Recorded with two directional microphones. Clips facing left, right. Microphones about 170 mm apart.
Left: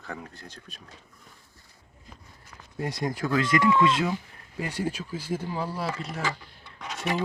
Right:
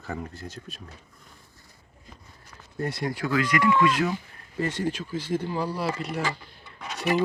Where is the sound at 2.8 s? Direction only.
20° left (ahead or behind).